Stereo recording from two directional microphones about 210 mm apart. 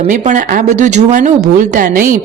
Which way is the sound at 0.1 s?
40° right (ahead or behind).